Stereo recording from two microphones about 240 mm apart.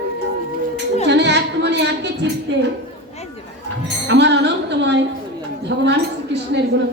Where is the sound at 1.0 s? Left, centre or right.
Right.